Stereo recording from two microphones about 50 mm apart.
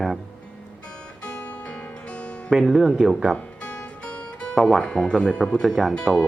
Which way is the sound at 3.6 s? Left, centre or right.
Left.